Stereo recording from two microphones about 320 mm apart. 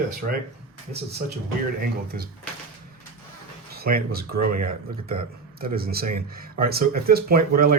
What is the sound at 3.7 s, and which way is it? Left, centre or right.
Speech, right.